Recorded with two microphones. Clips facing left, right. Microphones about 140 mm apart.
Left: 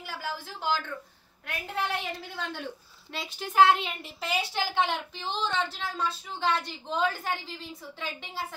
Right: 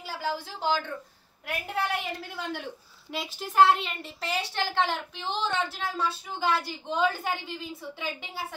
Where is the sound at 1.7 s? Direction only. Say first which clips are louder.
Right 1 dB; 10° right (ahead or behind).